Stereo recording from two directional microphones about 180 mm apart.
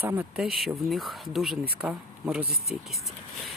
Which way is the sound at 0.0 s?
10° right (ahead or behind).